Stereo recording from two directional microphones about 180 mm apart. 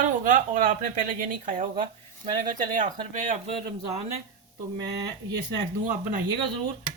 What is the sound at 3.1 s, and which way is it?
Speech, 45° right (ahead or behind).